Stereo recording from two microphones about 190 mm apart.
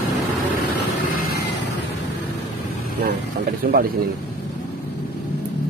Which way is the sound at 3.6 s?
55° right (ahead or behind).